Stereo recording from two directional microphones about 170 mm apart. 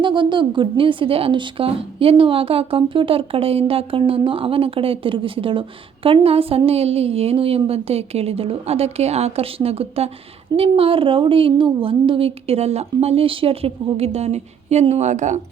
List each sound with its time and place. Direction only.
0.0 s a woman's voice: 30° right (ahead or behind); by 15.4 s 45° right (ahead or behind)